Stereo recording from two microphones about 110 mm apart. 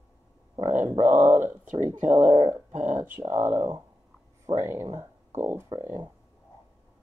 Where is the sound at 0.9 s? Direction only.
90° right.